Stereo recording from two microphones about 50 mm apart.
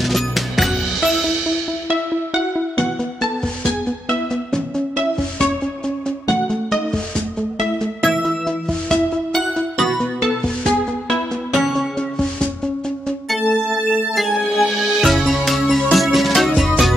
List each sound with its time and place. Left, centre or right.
0.0 s music: centre
3.2 s music: centre
6.0 s music: centre
13.3 s music: centre